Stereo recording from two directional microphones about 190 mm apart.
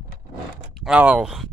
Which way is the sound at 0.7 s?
5° right (ahead or behind).